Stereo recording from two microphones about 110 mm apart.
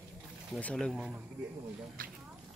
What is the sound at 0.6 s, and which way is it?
Speech, 10° left (ahead or behind).